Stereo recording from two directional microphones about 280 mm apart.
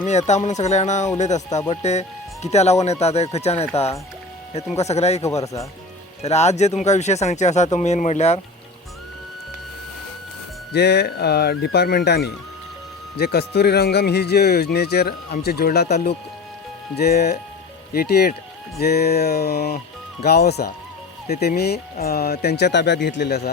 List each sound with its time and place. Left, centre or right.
0.0 s speech: left
6.2 s speech: left
10.7 s speech: left